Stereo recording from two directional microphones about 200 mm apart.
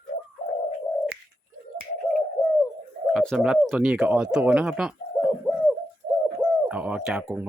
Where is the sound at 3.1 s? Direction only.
Centre (ahead or behind).